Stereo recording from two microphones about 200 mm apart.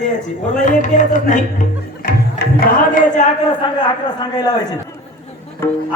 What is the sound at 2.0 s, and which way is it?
Music, 50° left (ahead or behind).